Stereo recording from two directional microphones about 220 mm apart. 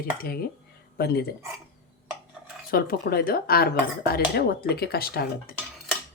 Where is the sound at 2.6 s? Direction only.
45° left (ahead or behind).